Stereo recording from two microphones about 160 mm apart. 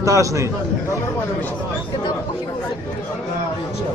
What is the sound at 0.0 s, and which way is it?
Speech, 20° right (ahead or behind).